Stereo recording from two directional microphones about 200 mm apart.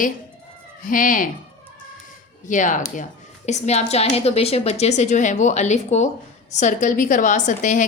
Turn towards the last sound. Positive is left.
turn(degrees=40)  # may be behind; listen again after turning